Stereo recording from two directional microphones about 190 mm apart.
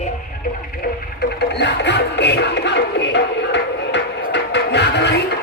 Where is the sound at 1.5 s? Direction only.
65° left (ahead or behind).